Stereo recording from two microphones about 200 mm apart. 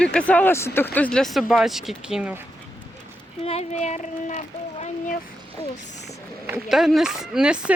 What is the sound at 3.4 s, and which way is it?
Speech, 35° left (ahead or behind).